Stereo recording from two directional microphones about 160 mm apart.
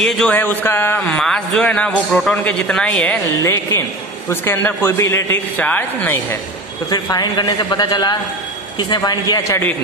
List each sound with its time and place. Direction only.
0.0 s speech: 5° left (ahead or behind)
6.9 s a man's voice: 25° left (ahead or behind)